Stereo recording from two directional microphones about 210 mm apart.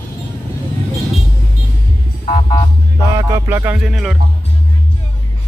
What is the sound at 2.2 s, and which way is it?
Music, 35° left (ahead or behind).